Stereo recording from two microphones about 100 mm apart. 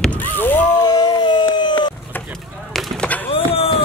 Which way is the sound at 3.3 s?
70° left (ahead or behind).